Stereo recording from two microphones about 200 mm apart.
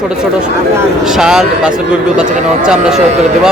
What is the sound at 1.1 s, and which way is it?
Speech, 5° right (ahead or behind).